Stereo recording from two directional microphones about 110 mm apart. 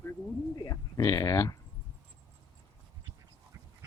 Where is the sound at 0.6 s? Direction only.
35° left (ahead or behind).